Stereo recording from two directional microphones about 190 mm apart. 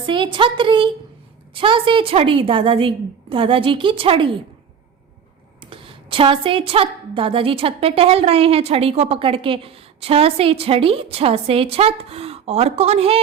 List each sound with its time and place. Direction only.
0.0 s a woman's voice: 25° right (ahead or behind)
5.5 s a woman's voice: 30° right (ahead or behind)